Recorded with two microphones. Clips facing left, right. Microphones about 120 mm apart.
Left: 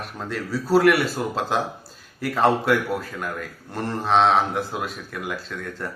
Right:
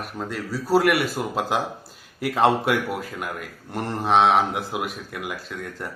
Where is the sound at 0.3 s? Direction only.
10° right (ahead or behind).